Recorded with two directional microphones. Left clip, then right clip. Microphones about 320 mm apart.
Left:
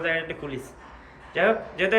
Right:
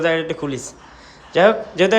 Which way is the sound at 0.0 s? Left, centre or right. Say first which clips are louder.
Right 8 dB; centre.